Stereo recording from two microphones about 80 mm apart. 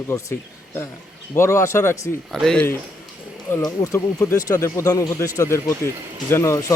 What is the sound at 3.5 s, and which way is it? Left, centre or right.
Speech, left.